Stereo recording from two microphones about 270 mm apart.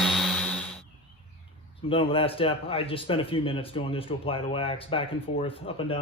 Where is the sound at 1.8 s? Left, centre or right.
Centre.